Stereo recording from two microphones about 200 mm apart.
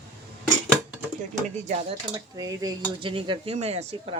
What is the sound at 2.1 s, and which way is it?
Speech, 20° right (ahead or behind).